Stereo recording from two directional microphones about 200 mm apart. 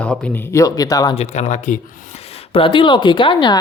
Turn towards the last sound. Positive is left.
turn(degrees=25)  # may be behind; listen again after turning